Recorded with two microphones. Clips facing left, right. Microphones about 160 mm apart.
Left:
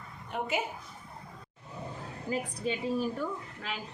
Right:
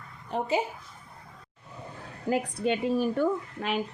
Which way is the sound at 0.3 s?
30° right (ahead or behind).